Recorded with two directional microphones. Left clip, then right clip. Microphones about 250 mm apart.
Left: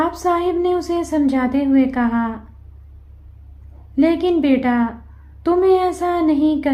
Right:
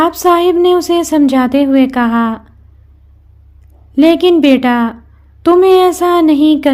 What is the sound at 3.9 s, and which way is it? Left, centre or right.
A woman's voice, right.